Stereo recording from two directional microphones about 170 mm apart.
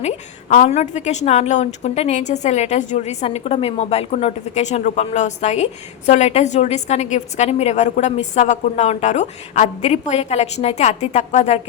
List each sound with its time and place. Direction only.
0.0 s a woman's voice: 45° left (ahead or behind)